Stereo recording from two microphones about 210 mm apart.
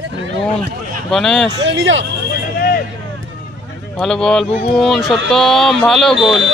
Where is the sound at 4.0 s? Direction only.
5° left (ahead or behind).